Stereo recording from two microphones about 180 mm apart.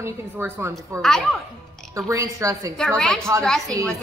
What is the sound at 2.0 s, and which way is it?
Speech, 20° right (ahead or behind).